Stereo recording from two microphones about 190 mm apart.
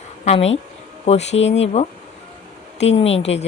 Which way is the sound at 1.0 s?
35° left (ahead or behind).